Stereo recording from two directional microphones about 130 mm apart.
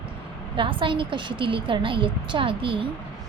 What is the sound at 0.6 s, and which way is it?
A woman's voice, 40° right (ahead or behind).